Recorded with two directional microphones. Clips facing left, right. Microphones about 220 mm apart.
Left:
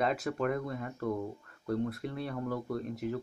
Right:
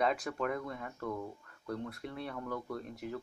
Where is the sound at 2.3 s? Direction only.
20° left (ahead or behind).